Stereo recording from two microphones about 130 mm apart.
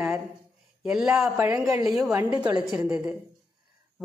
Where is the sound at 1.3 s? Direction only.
20° right (ahead or behind).